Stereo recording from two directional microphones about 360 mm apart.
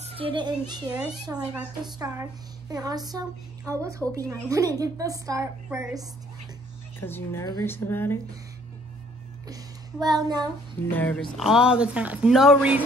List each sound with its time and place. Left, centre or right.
0.0 s a woman's voice: centre
7.0 s speech: centre
9.5 s a sound: centre
10.4 s speech: centre